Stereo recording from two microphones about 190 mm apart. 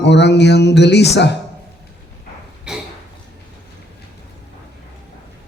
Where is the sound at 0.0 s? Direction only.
65° left (ahead or behind).